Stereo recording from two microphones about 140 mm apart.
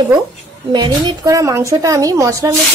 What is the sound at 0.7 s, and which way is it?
A woman's voice, 30° right (ahead or behind).